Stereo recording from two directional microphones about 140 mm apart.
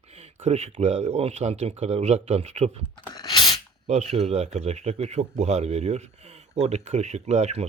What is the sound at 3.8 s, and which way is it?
Speech, 50° right (ahead or behind).